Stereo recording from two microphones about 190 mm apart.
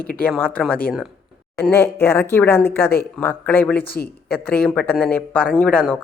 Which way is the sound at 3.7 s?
55° left (ahead or behind).